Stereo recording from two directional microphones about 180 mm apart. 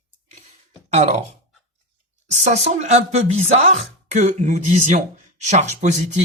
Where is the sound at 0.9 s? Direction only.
40° right (ahead or behind).